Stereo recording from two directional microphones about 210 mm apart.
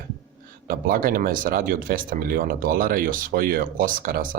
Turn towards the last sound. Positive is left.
turn(degrees=-40)  # may be behind; listen again after turning